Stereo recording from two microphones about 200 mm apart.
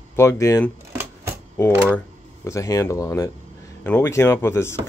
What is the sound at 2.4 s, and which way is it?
Speech, 15° left (ahead or behind).